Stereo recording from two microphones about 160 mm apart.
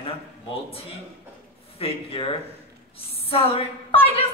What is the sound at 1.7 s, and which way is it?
A man's voice, 35° left (ahead or behind).